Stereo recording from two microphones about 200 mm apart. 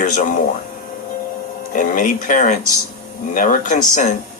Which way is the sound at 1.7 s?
40° left (ahead or behind).